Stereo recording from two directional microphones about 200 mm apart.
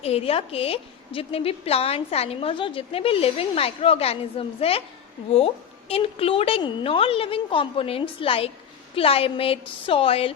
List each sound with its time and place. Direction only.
0.0 s a woman's voice: 30° left (ahead or behind)
5.9 s a woman's voice: 30° left (ahead or behind)